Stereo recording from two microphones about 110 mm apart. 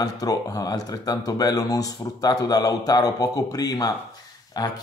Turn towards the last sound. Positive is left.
turn(degrees=35)  # may be behind; listen again after turning